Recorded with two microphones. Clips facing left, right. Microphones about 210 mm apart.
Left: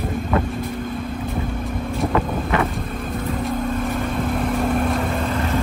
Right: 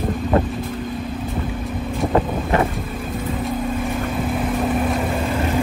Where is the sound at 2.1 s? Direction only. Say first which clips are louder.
Right 4 dB; 30° right (ahead or behind).